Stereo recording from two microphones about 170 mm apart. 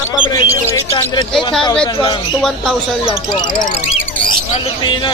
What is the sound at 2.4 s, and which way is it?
Speech, centre (ahead or behind).